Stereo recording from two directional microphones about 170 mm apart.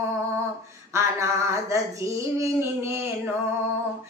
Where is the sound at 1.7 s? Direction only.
15° right (ahead or behind).